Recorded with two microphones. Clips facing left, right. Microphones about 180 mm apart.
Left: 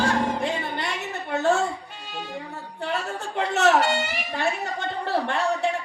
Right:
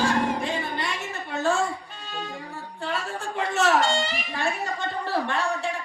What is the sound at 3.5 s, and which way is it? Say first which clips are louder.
Speech: left 3 dB; 65° left (ahead or behind).